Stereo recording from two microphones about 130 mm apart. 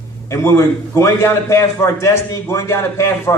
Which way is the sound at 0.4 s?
20° left (ahead or behind).